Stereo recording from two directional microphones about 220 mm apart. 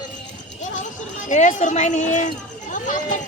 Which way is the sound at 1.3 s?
35° left (ahead or behind).